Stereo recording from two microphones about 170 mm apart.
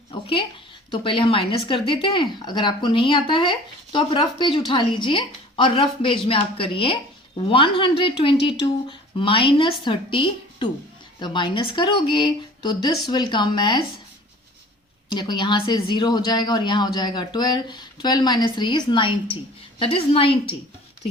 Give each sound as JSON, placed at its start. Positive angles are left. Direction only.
{"t": 0.1, "sound": "speech", "side_deg": 30}
{"t": 15.1, "sound": "a woman's voice", "side_deg": 25}